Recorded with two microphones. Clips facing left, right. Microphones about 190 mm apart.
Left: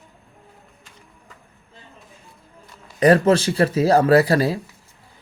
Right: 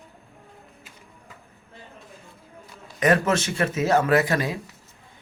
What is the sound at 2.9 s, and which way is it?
Speech, 35° left (ahead or behind).